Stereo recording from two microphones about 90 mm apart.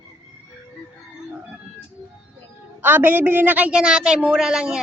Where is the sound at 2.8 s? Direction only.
20° right (ahead or behind).